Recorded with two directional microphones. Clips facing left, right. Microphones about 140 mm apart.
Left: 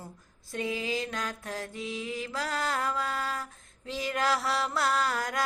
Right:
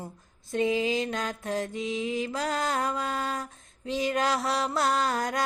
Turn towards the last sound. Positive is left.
turn(degrees=-20)  # may be behind; listen again after turning